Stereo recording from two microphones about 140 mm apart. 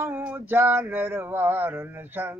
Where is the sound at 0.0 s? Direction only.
15° right (ahead or behind).